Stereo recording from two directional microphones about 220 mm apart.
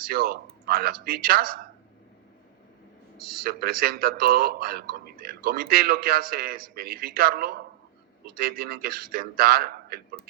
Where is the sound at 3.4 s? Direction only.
45° right (ahead or behind).